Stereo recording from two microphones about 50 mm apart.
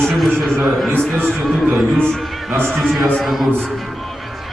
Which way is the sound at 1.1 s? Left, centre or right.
Right.